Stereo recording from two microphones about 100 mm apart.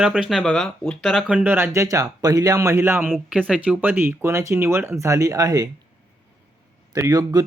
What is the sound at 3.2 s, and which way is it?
Speech, 10° right (ahead or behind).